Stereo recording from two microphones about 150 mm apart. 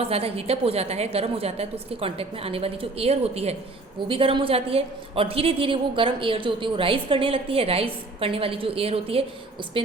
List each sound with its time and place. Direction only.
0.0 s a woman's voice: 40° right (ahead or behind)